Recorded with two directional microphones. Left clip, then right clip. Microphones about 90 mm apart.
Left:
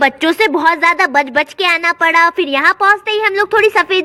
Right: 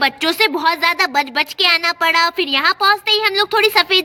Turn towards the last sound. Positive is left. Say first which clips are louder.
# left 2 dB
turn(degrees=40)  # may be behind; listen again after turning